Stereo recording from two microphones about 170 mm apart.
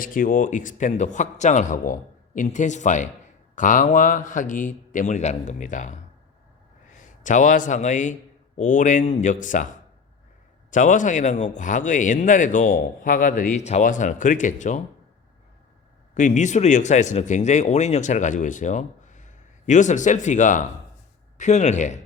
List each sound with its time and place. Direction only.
0.0 s a man's voice: 55° left (ahead or behind)
10.7 s speech: 50° left (ahead or behind)
16.1 s speech: 45° left (ahead or behind)